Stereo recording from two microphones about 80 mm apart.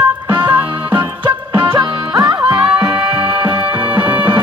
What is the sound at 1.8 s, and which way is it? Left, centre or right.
Music, right.